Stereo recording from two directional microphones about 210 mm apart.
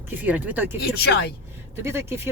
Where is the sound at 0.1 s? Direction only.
10° right (ahead or behind).